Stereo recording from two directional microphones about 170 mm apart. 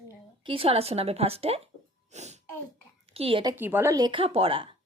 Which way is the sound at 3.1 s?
35° right (ahead or behind).